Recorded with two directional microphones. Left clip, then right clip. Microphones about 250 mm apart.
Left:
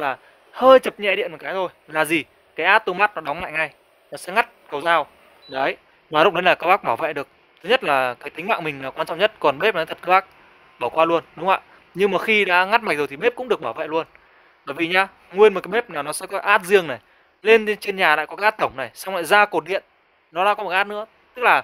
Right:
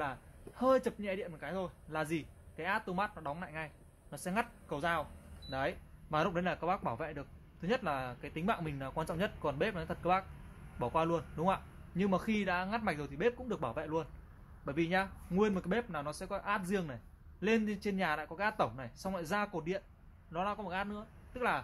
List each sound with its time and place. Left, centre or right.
0.0 s speech: left